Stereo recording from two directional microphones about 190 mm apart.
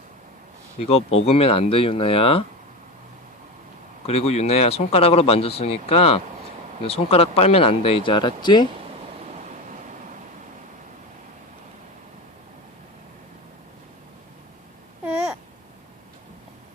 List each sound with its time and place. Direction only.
0.8 s speech: 30° left (ahead or behind)
4.0 s speech: 30° left (ahead or behind)
9.3 s waves: 40° right (ahead or behind)
15.0 s babbling: 5° right (ahead or behind)